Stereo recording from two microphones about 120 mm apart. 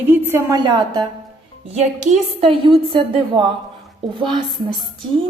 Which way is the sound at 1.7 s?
75° right (ahead or behind).